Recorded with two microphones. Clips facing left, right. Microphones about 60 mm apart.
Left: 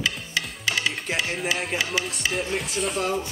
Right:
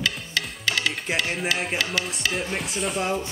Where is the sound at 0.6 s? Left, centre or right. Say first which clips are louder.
Right 1 dB; centre.